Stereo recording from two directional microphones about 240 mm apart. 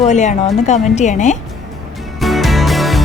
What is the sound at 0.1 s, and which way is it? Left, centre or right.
A woman's voice, left.